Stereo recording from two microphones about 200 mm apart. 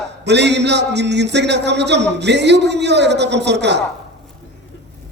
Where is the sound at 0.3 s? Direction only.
60° right (ahead or behind).